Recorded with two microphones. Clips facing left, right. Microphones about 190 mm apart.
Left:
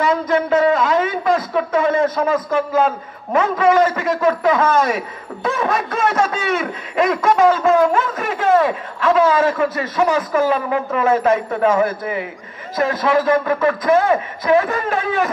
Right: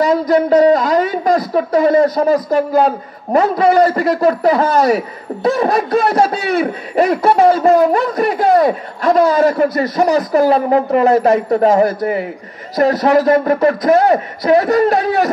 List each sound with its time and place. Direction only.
0.0 s a man's voice: 35° right (ahead or behind)